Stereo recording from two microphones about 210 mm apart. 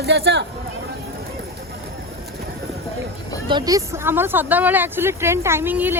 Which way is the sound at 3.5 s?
20° right (ahead or behind).